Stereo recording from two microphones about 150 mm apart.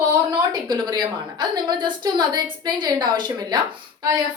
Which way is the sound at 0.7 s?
30° right (ahead or behind).